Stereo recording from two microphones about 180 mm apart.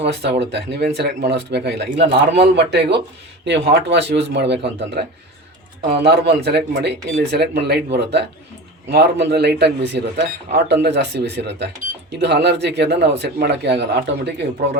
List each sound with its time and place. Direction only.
0.0 s speech: 70° right (ahead or behind)